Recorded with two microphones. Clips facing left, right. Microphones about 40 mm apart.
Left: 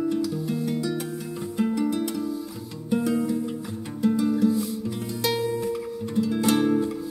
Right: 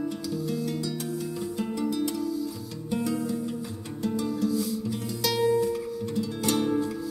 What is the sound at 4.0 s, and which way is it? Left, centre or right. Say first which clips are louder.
Music: left 6 dB; left.